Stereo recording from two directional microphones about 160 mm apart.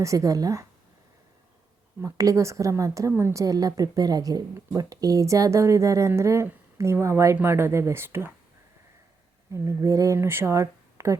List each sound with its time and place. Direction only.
0.0 s a woman's voice: 20° right (ahead or behind)
2.0 s a woman's voice: 20° right (ahead or behind)
9.5 s a woman's voice: 20° right (ahead or behind)